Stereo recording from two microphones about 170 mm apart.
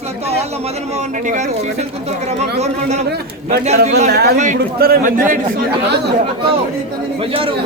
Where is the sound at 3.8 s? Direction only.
40° right (ahead or behind).